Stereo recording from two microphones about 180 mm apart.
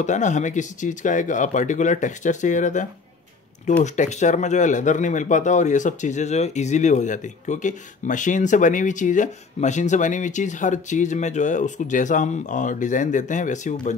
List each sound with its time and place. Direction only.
0.0 s speech: 40° left (ahead or behind)